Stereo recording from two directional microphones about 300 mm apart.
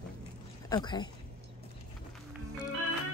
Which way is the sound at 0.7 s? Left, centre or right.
Centre.